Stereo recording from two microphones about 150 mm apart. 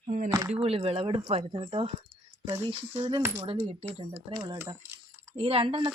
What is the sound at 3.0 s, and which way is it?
Speech, 35° right (ahead or behind).